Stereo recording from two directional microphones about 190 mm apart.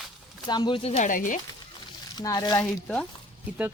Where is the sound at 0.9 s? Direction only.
45° left (ahead or behind).